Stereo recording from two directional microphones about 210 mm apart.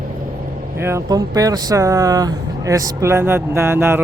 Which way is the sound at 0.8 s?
15° right (ahead or behind).